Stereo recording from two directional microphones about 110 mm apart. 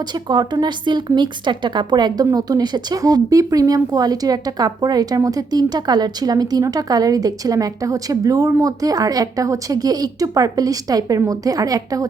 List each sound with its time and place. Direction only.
0.0 s a woman's voice: 40° right (ahead or behind)